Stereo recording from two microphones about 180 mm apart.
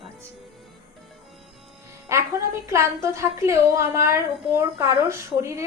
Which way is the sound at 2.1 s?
15° right (ahead or behind).